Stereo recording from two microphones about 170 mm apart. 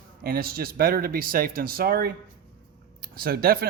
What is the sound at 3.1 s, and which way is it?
Speech, 60° right (ahead or behind).